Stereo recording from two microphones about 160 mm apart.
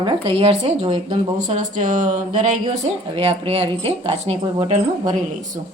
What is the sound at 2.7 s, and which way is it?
A woman's voice, 40° right (ahead or behind).